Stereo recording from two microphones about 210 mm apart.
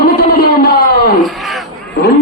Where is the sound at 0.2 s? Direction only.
45° left (ahead or behind).